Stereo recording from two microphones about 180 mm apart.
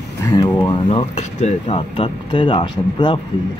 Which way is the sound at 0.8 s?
35° left (ahead or behind).